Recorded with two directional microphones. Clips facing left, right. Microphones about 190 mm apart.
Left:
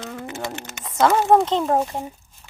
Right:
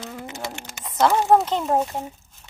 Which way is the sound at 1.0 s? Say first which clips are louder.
Left 1 dB; centre (ahead or behind).